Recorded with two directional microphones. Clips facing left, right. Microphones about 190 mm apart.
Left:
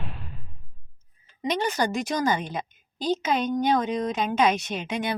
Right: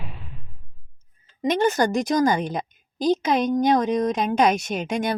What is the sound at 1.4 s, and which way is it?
A woman's voice, 45° right (ahead or behind).